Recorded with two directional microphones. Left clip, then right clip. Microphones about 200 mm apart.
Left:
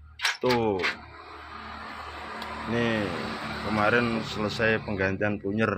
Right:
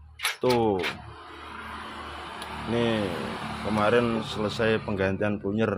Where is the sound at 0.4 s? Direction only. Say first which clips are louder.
Right 3 dB; 15° right (ahead or behind).